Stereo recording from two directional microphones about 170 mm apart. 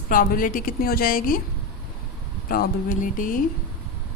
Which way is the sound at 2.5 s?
55° left (ahead or behind).